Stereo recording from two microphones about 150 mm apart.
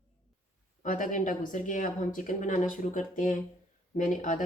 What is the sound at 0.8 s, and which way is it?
Speech, 60° left (ahead or behind).